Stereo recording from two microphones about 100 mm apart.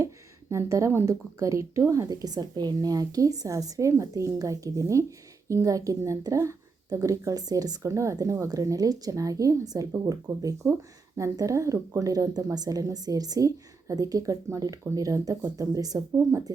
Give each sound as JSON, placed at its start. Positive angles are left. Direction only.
{"t": 0.5, "sound": "a woman's voice", "side_deg": -30}